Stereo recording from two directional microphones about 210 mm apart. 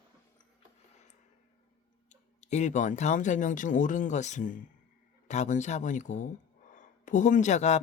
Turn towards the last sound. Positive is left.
turn(degrees=35)  # may be behind; listen again after turning